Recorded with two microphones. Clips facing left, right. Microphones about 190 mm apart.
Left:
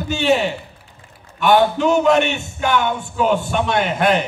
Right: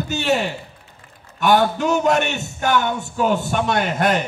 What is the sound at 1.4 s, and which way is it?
A man's voice, 45° right (ahead or behind).